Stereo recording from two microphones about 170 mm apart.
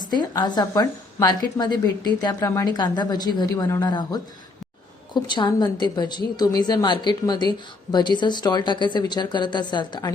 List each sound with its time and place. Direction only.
0.1 s a woman's voice: 25° left (ahead or behind)